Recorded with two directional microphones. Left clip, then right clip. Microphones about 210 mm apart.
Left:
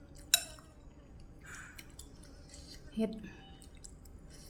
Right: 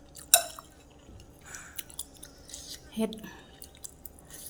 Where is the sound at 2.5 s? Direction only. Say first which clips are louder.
Right 5 dB; 5° left (ahead or behind).